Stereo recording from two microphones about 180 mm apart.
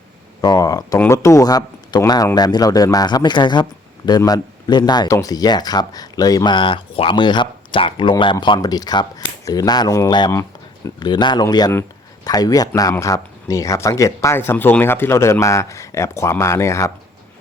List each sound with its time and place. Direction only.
0.4 s speech: 20° left (ahead or behind)